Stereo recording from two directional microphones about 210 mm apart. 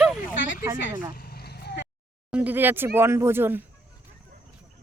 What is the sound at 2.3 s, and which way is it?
Speech, 10° right (ahead or behind).